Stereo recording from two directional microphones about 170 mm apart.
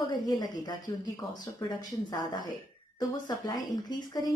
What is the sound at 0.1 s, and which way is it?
A woman's voice, 25° left (ahead or behind).